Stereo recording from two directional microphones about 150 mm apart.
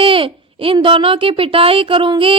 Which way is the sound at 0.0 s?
35° right (ahead or behind).